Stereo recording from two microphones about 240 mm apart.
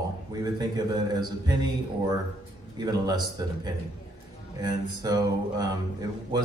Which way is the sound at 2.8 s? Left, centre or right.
Centre.